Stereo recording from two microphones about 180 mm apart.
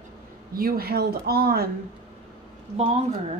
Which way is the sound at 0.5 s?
55° right (ahead or behind).